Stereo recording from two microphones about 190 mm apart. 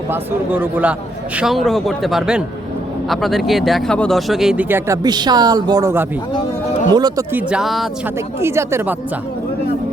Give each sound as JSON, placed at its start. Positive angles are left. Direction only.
{"t": 0.1, "sound": "speech", "side_deg": -10}
{"t": 5.0, "sound": "speech", "side_deg": -20}
{"t": 7.3, "sound": "speech", "side_deg": -5}
{"t": 8.4, "sound": "speech", "side_deg": -15}